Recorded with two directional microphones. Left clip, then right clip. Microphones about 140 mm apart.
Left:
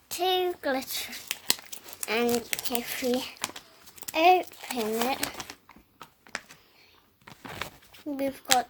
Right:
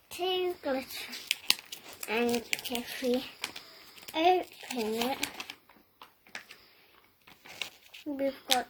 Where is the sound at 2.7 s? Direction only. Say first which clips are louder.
Left 4 dB; 35° left (ahead or behind).